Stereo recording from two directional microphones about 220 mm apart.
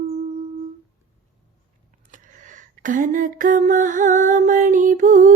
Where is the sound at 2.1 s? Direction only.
35° right (ahead or behind).